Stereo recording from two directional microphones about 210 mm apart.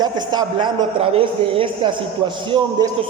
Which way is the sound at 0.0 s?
20° right (ahead or behind).